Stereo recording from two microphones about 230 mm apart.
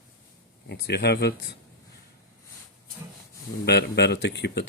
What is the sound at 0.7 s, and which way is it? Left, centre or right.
Speech, left.